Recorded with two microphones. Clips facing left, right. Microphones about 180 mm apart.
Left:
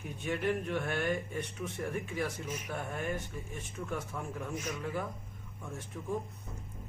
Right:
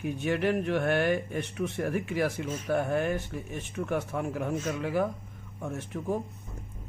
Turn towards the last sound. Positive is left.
turn(degrees=-75)  # may be behind; listen again after turning